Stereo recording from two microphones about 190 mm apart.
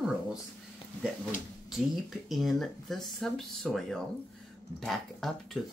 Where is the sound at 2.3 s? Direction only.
Centre (ahead or behind).